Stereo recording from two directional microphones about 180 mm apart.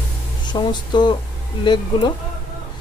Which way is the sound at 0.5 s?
25° left (ahead or behind).